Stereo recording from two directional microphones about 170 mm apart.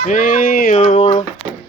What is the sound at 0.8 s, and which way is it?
Speech, 45° left (ahead or behind).